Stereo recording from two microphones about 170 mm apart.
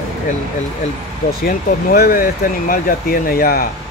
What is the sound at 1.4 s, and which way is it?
Speech, 60° left (ahead or behind).